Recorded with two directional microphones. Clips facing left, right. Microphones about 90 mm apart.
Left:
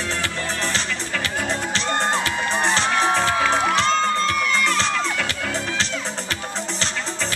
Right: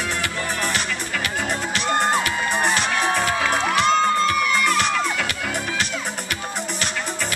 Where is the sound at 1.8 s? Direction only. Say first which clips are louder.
Right 3 dB; 10° right (ahead or behind).